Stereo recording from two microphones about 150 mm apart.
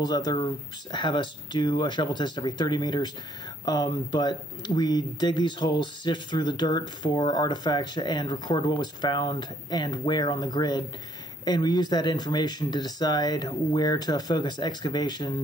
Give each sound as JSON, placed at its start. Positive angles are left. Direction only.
{"t": 0.0, "sound": "speech", "side_deg": 30}